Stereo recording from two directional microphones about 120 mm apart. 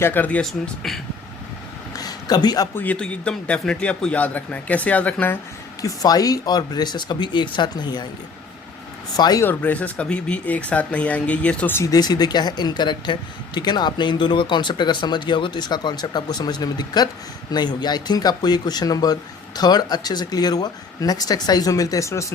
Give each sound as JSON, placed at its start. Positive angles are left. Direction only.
{"t": 0.0, "sound": "speech", "side_deg": 15}
{"t": 2.0, "sound": "a sound", "side_deg": 35}
{"t": 2.7, "sound": "speech", "side_deg": 10}
{"t": 5.8, "sound": "speech", "side_deg": 30}
{"t": 9.1, "sound": "speech", "side_deg": 35}
{"t": 9.4, "sound": "speech", "side_deg": 15}
{"t": 11.8, "sound": "speech", "side_deg": 35}